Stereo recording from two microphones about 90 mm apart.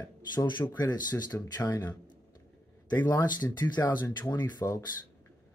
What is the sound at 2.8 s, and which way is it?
Speech, 50° left (ahead or behind).